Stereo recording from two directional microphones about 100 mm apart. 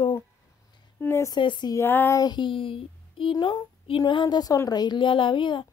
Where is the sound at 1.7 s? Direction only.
20° left (ahead or behind).